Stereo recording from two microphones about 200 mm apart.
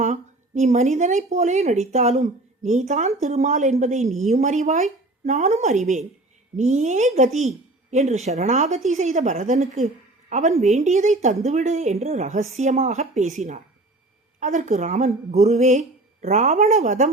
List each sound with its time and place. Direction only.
0.0 s speech: 35° right (ahead or behind)